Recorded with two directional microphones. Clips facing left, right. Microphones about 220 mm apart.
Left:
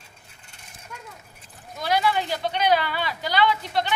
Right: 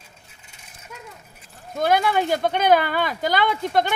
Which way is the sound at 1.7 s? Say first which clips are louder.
Right 4 dB; 50° right (ahead or behind).